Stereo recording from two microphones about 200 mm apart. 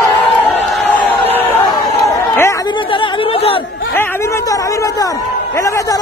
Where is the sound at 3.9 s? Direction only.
10° left (ahead or behind).